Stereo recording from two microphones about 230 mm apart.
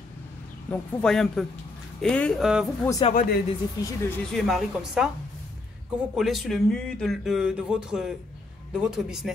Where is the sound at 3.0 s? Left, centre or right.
Left.